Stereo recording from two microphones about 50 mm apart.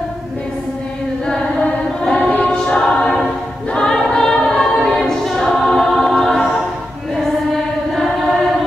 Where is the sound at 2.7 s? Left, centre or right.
Centre.